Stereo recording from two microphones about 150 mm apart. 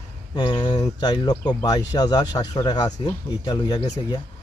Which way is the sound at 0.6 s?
30° left (ahead or behind).